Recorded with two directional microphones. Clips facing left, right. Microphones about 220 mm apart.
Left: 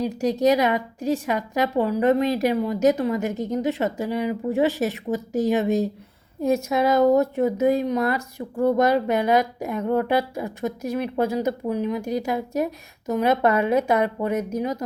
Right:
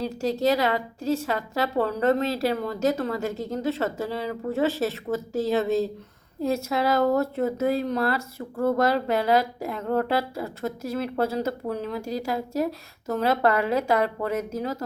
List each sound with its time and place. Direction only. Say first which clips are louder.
0.0 s a woman's voice: left 4 dB; 15° left (ahead or behind)